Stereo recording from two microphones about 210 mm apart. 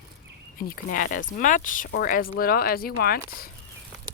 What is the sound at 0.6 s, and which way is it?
Speech, 40° left (ahead or behind).